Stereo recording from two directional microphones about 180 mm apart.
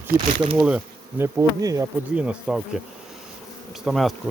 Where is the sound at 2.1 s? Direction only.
5° right (ahead or behind).